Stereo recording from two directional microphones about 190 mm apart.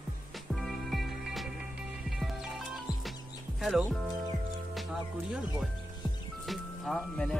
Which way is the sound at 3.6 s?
Centre (ahead or behind).